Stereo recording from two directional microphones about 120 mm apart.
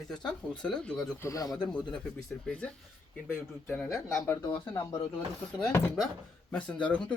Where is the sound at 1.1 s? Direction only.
25° left (ahead or behind).